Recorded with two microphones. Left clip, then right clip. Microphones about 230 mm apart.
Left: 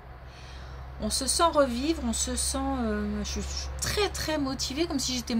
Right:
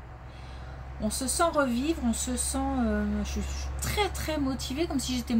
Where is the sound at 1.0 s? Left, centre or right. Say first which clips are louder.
Left 2 dB; left.